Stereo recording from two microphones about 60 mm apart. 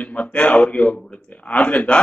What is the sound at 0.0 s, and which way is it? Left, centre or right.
A man's voice, left.